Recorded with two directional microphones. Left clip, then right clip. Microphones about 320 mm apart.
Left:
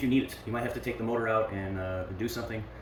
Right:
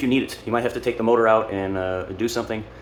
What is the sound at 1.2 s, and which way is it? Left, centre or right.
Speech, right.